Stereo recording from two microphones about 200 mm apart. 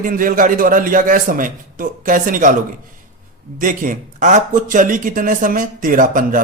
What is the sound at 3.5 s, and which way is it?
Speech, 40° right (ahead or behind).